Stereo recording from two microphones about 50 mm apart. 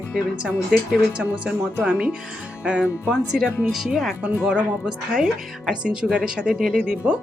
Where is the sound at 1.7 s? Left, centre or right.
Right.